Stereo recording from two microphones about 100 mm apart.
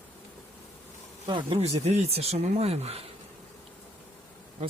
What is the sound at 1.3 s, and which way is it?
Speech, 70° right (ahead or behind).